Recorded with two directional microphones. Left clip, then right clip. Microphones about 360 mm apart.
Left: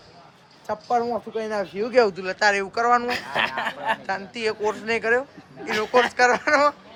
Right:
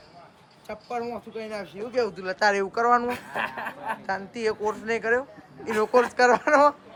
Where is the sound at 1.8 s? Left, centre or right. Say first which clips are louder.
Left 8 dB; left.